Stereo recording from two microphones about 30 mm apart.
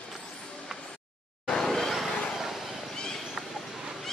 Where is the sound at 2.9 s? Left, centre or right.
Left.